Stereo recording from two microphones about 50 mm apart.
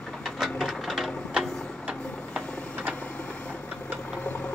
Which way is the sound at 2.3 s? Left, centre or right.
Right.